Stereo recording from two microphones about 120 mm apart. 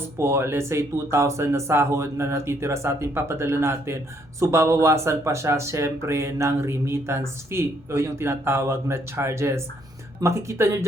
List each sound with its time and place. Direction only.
0.2 s speech: 20° right (ahead or behind)